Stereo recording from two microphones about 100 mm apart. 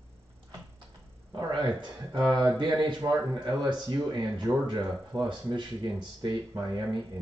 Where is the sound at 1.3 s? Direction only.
45° right (ahead or behind).